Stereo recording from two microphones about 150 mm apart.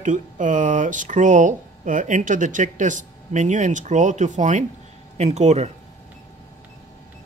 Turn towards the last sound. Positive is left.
turn(degrees=-50)  # may be behind; listen again after turning